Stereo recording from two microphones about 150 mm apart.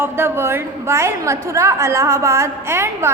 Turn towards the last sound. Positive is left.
turn(degrees=-15)  # may be behind; listen again after turning